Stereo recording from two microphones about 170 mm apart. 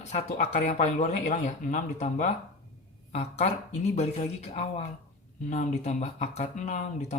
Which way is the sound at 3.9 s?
40° left (ahead or behind).